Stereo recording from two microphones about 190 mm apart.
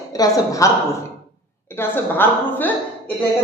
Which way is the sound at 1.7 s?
10° left (ahead or behind).